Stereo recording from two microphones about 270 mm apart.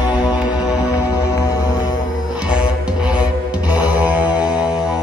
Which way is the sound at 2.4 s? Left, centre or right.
Centre.